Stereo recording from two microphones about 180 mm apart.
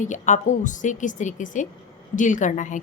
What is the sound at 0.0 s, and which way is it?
A woman's voice, 45° left (ahead or behind).